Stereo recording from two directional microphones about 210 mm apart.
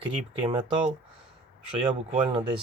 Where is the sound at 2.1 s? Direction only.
25° right (ahead or behind).